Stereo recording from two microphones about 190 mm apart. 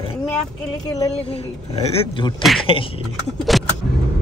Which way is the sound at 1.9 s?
30° left (ahead or behind).